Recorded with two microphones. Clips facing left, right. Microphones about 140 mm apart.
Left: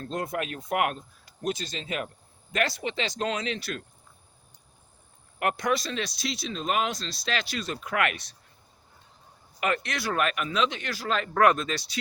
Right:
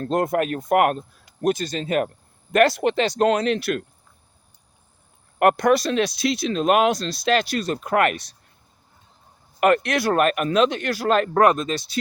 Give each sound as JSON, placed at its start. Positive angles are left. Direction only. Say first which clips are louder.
{"t": 0.0, "sound": "speech", "louder": "right 10 dB", "side_deg": -55}
{"t": 2.5, "sound": "speech", "louder": "right 11 dB", "side_deg": -60}
{"t": 5.4, "sound": "speech", "louder": "right 10 dB", "side_deg": -55}
{"t": 9.6, "sound": "speech", "louder": "right 10 dB", "side_deg": -55}